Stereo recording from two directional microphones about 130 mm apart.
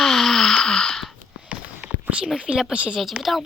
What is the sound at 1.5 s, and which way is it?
Speech, 10° right (ahead or behind).